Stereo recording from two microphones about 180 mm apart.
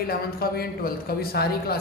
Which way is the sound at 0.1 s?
55° left (ahead or behind).